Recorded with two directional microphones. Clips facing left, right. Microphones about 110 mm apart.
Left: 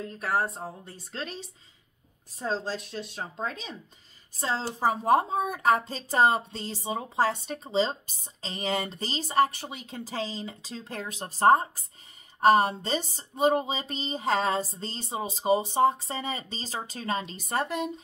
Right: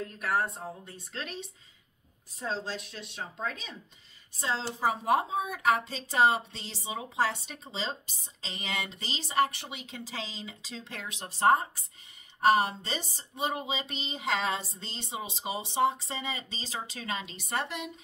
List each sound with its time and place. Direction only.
0.2 s speech: 30° left (ahead or behind)